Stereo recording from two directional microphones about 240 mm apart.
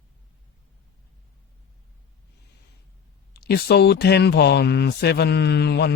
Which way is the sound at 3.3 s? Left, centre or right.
Left.